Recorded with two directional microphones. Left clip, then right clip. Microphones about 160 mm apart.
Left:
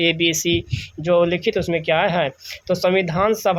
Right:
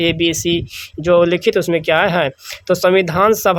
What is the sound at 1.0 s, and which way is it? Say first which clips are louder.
Speech: right 5 dB; 40° right (ahead or behind).